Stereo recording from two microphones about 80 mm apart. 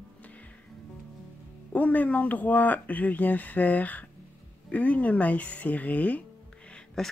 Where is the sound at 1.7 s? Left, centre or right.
Centre.